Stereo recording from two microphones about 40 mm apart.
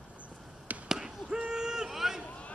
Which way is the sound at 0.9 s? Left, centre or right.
Centre.